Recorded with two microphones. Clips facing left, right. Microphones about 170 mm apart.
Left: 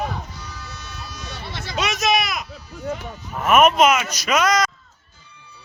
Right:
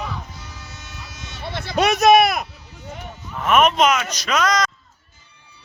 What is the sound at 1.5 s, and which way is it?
Speech, 55° right (ahead or behind).